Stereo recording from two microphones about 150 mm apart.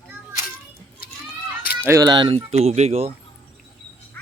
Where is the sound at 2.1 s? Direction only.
35° right (ahead or behind).